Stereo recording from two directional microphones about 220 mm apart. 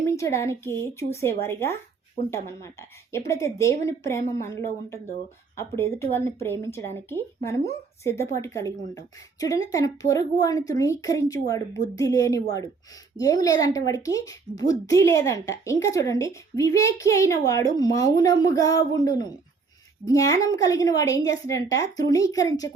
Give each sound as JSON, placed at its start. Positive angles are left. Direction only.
{"t": 0.0, "sound": "speech", "side_deg": 15}